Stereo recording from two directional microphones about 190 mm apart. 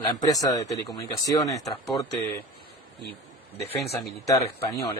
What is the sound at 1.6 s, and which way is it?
Speech, centre (ahead or behind).